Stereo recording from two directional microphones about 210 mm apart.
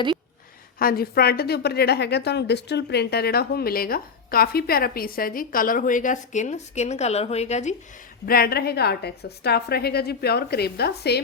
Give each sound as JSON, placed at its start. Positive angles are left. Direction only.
{"t": 0.8, "sound": "a woman's voice", "side_deg": 45}
{"t": 8.3, "sound": "a woman's voice", "side_deg": 45}